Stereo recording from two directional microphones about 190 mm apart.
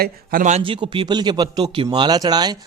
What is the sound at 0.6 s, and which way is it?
Speech, 25° right (ahead or behind).